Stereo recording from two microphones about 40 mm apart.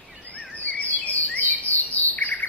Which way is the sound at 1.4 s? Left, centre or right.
Left.